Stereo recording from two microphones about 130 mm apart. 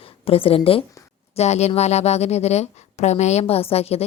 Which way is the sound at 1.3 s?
55° left (ahead or behind).